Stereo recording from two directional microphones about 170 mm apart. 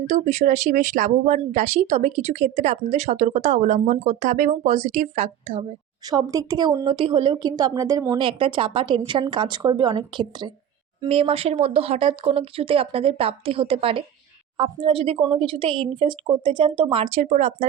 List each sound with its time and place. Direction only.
0.1 s speech: 45° right (ahead or behind)
6.1 s a woman's voice: 20° right (ahead or behind)
8.1 s a woman's voice: 30° right (ahead or behind)